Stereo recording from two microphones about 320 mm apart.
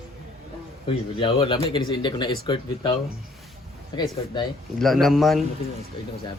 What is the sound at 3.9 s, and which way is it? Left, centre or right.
Speech, centre.